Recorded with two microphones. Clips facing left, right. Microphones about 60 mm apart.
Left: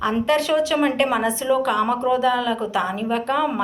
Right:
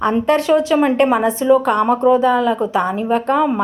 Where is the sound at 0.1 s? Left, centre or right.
Right.